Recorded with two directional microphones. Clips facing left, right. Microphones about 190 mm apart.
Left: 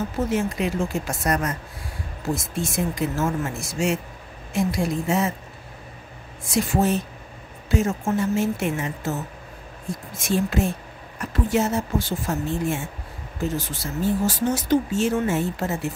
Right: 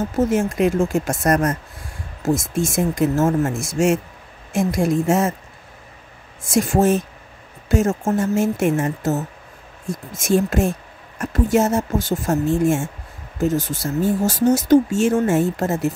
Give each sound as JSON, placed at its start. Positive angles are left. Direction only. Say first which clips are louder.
{"t": 0.2, "sound": "speech", "louder": "right 7 dB", "side_deg": -45}
{"t": 6.4, "sound": "speech", "louder": "right 5 dB", "side_deg": -45}